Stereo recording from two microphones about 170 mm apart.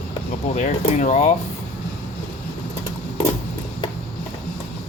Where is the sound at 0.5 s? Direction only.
45° left (ahead or behind).